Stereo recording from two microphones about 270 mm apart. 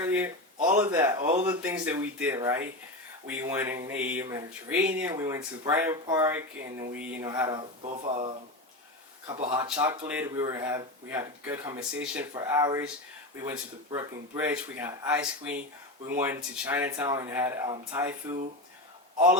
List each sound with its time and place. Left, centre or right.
0.0 s a sound: centre
0.8 s speech: centre
1.2 s speech: right
1.5 s speech: centre; by 8.3 s right
9.2 s speech: centre